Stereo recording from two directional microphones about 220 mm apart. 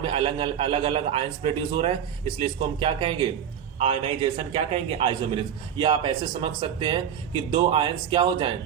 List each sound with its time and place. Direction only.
0.0 s a man's voice: 25° right (ahead or behind)